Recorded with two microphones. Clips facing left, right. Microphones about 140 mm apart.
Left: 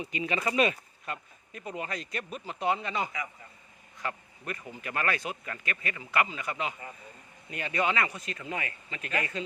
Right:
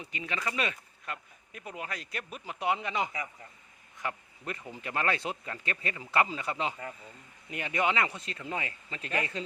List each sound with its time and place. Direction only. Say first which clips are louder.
0.1 s speech: left 4 dB; 15° left (ahead or behind)
1.0 s speech: left 2 dB; centre (ahead or behind); by 9.4 s 30° right (ahead or behind)